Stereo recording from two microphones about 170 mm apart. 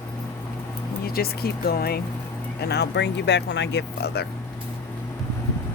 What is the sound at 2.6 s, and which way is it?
Speech, 75° left (ahead or behind).